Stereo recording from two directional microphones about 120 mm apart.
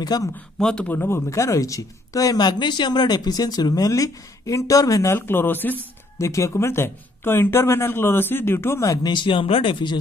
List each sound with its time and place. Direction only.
0.0 s speech: 35° left (ahead or behind)
0.6 s speech: 5° left (ahead or behind); by 9.9 s 45° left (ahead or behind)